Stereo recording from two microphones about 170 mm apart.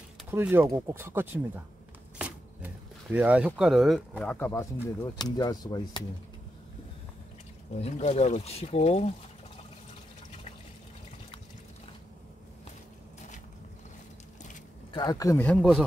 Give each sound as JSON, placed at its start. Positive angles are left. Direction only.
{"t": 0.3, "sound": "speech", "side_deg": -10}
{"t": 2.1, "sound": "a sound", "side_deg": -10}
{"t": 5.0, "sound": "speech", "side_deg": 25}
{"t": 7.8, "sound": "speech", "side_deg": 40}
{"t": 14.9, "sound": "speech", "side_deg": 25}
{"t": 15.4, "sound": "speech", "side_deg": 5}